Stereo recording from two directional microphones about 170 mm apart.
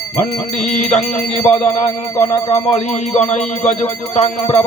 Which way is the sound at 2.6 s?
40° left (ahead or behind).